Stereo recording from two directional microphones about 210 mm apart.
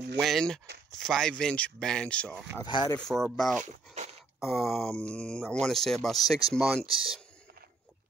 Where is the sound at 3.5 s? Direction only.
35° right (ahead or behind).